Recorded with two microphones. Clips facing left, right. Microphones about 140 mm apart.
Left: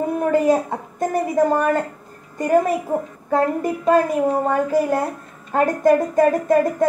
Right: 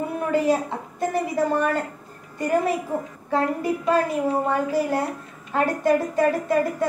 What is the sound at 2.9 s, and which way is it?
A woman's voice, 45° left (ahead or behind).